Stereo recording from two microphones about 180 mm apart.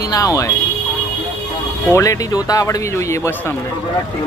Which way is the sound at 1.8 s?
15° left (ahead or behind).